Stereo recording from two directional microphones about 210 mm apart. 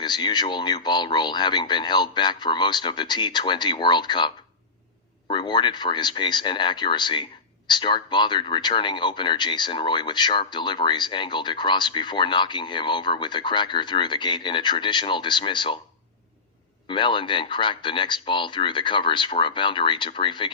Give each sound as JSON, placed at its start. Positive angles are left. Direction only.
{"t": 0.0, "sound": "speech", "side_deg": 20}
{"t": 5.3, "sound": "speech", "side_deg": 20}
{"t": 16.9, "sound": "speech", "side_deg": 25}